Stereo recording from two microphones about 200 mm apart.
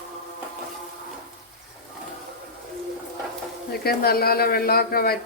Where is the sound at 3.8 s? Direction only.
50° left (ahead or behind).